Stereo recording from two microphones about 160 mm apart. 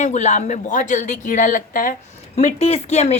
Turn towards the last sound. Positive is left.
turn(degrees=40)  # may be behind; listen again after turning